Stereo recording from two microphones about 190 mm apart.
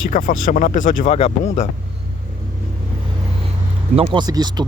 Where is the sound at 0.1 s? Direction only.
45° left (ahead or behind).